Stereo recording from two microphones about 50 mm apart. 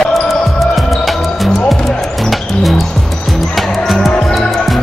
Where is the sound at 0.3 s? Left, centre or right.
Centre.